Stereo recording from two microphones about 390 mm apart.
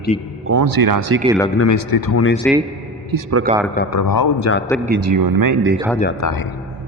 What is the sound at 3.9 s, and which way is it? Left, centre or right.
Speech, left.